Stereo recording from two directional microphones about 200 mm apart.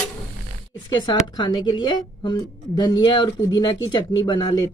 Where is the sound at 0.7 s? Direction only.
20° left (ahead or behind).